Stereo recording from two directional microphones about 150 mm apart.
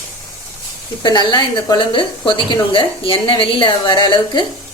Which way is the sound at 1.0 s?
30° left (ahead or behind).